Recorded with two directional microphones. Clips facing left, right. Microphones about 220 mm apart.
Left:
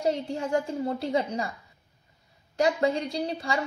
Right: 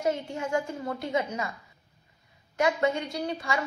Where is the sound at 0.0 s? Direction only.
35° left (ahead or behind).